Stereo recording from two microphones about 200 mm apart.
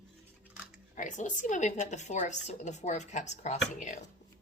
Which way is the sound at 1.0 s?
40° left (ahead or behind).